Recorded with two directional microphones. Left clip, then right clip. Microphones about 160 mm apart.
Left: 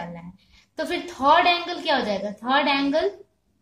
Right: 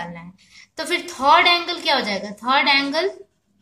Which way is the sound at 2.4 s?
60° right (ahead or behind).